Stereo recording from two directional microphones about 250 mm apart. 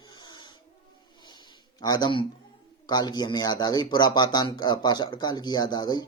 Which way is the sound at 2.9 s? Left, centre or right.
Centre.